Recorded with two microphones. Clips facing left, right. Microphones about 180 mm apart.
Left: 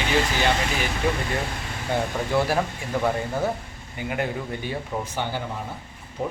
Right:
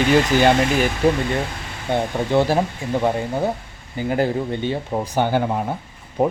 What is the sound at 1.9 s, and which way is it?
Speech, 25° right (ahead or behind).